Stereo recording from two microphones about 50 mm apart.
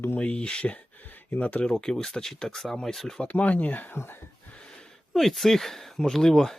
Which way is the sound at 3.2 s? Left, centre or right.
Left.